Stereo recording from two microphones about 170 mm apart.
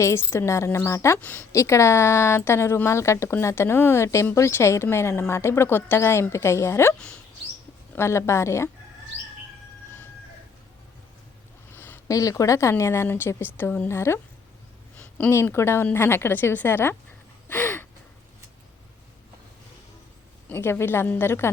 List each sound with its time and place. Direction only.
0.0 s a woman's voice: 15° left (ahead or behind)
7.9 s a woman's voice: 15° left (ahead or behind)
11.7 s a woman's voice: 15° left (ahead or behind)
17.5 s gasp: 15° left (ahead or behind)
20.5 s a woman's voice: 15° left (ahead or behind)